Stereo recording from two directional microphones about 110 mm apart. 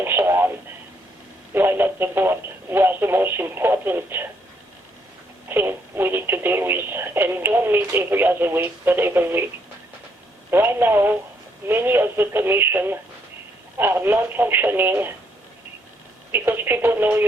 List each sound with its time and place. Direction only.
0.0 s radio: 20° right (ahead or behind)
1.5 s speech: 20° right (ahead or behind)
5.5 s speech: 20° right (ahead or behind)
10.5 s speech: 20° right (ahead or behind)
16.3 s speech: 20° right (ahead or behind)